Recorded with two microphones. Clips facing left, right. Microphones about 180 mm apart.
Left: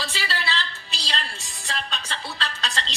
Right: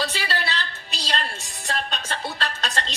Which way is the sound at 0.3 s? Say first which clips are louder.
Right 1 dB; 50° right (ahead or behind).